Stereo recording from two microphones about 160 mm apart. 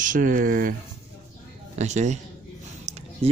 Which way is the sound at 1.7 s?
45° right (ahead or behind).